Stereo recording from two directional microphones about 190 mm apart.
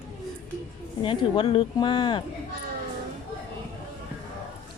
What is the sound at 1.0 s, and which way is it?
Speech, 25° left (ahead or behind).